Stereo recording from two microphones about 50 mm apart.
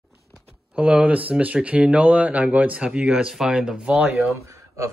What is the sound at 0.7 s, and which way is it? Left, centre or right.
Speech, right.